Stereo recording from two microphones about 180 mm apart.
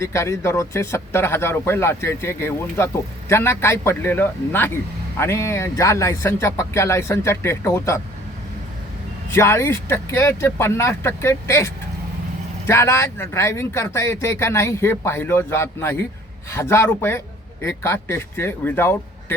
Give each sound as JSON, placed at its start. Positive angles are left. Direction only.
{"t": 0.0, "sound": "speech", "side_deg": 15}
{"t": 9.3, "sound": "speech", "side_deg": 15}